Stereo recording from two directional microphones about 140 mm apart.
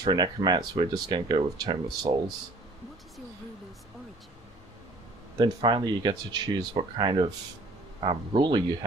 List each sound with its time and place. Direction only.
0.0 s speech: 30° right (ahead or behind)
5.4 s speech: 35° right (ahead or behind)